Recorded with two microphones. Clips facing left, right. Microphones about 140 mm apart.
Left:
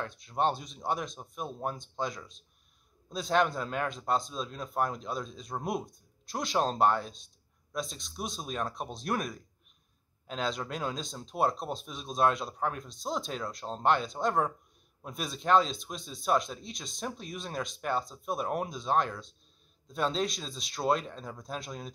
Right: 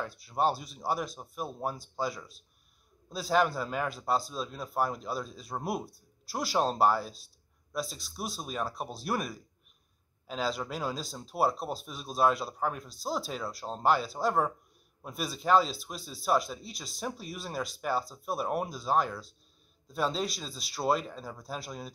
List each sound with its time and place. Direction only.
0.0 s speech: 5° right (ahead or behind)